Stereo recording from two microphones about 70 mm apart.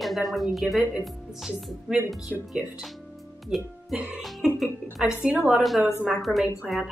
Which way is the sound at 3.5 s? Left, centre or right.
Centre.